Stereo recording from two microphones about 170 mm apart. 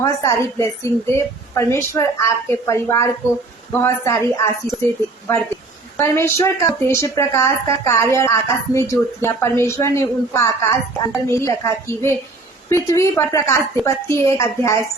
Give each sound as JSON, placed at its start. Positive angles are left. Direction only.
{"t": 0.0, "sound": "a woman's voice", "side_deg": 20}
{"t": 6.0, "sound": "a woman's voice", "side_deg": 15}